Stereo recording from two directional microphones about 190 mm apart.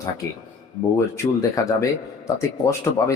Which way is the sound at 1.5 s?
15° left (ahead or behind).